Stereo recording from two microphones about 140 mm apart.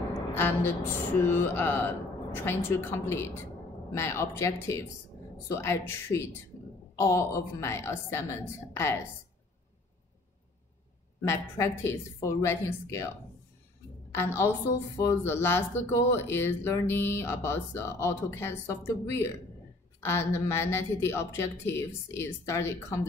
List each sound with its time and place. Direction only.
0.3 s a woman's voice: 15° left (ahead or behind)
11.1 s a woman's voice: 20° left (ahead or behind)
14.1 s a woman's voice: 15° left (ahead or behind)